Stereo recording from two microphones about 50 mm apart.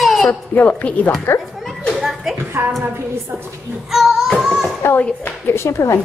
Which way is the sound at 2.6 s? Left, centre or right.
Right.